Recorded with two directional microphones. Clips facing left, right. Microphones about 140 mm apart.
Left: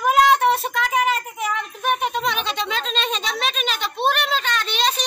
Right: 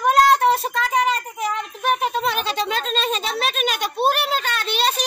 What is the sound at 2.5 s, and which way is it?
Speech, 40° right (ahead or behind).